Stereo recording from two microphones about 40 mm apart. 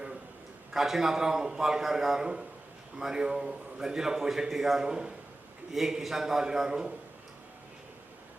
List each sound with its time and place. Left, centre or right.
0.7 s a man's voice: centre
5.7 s a man's voice: centre